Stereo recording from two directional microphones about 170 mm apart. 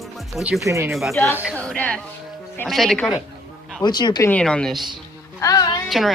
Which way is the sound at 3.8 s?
25° left (ahead or behind).